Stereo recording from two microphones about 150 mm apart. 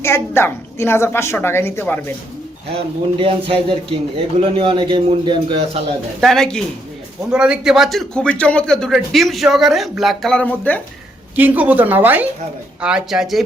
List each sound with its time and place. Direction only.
0.0 s a woman's voice: 15° left (ahead or behind)
2.6 s a man's voice: 40° right (ahead or behind)
6.1 s a man's voice: 5° left (ahead or behind)
11.3 s a woman's voice: 10° right (ahead or behind)